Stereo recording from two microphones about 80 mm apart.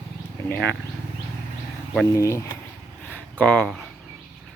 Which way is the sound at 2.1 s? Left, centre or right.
Left.